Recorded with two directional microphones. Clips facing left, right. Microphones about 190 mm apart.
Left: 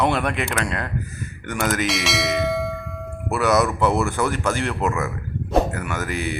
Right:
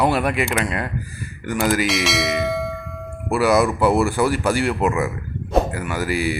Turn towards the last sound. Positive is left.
turn(degrees=-10)  # may be behind; listen again after turning